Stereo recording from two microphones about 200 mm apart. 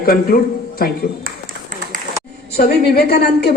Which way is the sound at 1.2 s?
45° right (ahead or behind).